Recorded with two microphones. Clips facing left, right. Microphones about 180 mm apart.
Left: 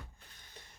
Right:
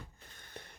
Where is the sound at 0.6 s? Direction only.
60° right (ahead or behind).